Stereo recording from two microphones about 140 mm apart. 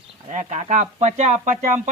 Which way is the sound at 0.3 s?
60° right (ahead or behind).